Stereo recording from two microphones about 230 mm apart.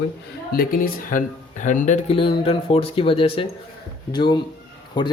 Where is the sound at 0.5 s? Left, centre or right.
Left.